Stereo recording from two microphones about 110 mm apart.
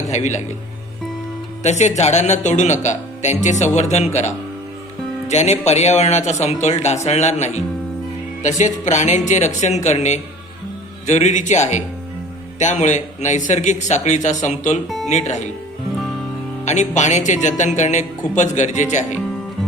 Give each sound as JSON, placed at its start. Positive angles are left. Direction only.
{"t": 0.1, "sound": "speech", "side_deg": 90}
{"t": 1.6, "sound": "speech", "side_deg": 90}
{"t": 5.3, "sound": "speech", "side_deg": 90}
{"t": 14.8, "sound": "speech", "side_deg": 0}
{"t": 15.1, "sound": "speech", "side_deg": 90}
{"t": 16.6, "sound": "speech", "side_deg": 90}